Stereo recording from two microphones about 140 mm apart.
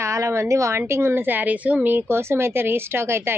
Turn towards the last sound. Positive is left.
turn(degrees=-20)  # may be behind; listen again after turning